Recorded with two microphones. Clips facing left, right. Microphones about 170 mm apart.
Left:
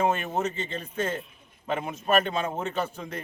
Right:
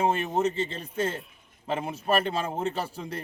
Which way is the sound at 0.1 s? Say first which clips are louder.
Right 2 dB; 30° right (ahead or behind).